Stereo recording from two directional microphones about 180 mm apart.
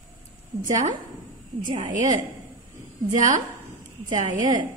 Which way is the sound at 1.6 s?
45° right (ahead or behind).